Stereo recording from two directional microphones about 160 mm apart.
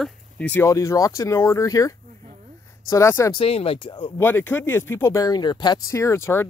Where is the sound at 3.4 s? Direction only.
35° left (ahead or behind).